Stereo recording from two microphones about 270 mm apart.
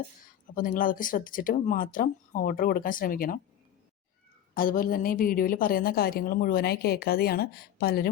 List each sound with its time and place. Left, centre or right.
0.5 s a woman's voice: left
4.5 s a woman's voice: left